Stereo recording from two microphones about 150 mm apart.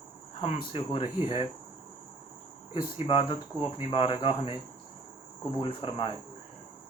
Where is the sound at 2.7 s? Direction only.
35° left (ahead or behind).